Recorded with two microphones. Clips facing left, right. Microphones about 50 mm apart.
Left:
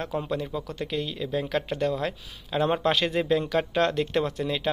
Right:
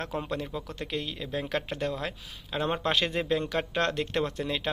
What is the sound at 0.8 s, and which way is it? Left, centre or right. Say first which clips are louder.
Speech: left 4 dB; right.